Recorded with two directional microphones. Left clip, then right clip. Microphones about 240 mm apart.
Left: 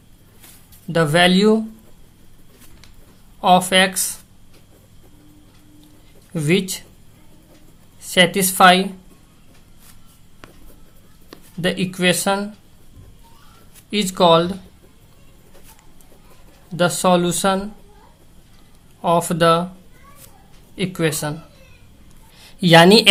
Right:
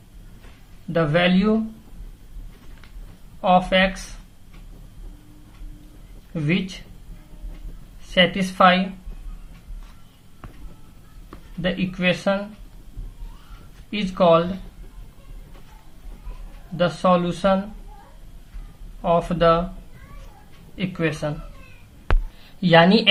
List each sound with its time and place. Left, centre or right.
0.9 s speech: left
3.4 s speech: left
6.3 s speech: left
8.1 s speech: left
11.3 s speech: left
13.9 s speech: left
16.7 s speech: left
19.0 s speech: left
20.7 s speech: left
22.4 s speech: left